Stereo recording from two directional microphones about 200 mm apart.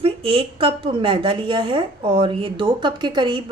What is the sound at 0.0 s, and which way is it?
A woman's voice, 25° right (ahead or behind).